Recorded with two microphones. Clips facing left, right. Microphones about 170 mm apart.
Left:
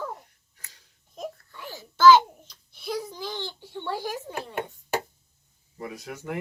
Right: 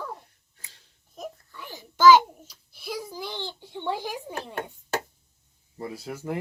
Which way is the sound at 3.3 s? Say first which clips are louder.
Left 1 dB; 15° right (ahead or behind).